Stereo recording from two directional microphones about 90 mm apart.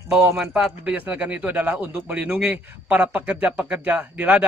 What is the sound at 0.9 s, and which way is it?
Speech, 15° right (ahead or behind).